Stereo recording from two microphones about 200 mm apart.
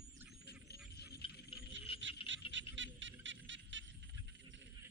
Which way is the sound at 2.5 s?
70° right (ahead or behind).